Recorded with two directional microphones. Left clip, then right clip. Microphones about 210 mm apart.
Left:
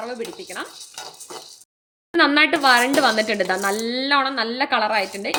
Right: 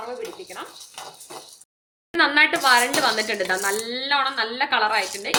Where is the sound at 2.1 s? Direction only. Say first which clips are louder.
Left 1 dB; 45° left (ahead or behind).